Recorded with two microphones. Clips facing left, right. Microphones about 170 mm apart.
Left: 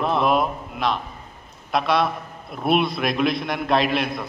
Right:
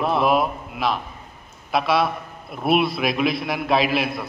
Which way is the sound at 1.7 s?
Centre (ahead or behind).